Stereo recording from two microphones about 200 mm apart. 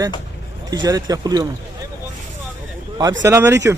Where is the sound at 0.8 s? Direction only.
20° right (ahead or behind).